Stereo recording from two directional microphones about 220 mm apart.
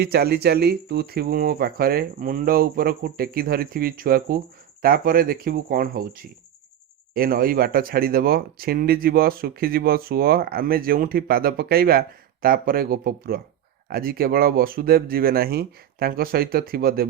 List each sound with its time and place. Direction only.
0.0 s speech: 45° right (ahead or behind)